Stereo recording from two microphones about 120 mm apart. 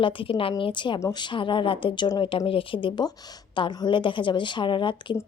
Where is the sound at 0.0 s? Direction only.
45° left (ahead or behind).